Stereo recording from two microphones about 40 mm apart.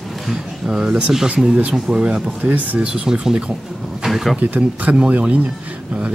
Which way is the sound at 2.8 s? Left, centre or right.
Right.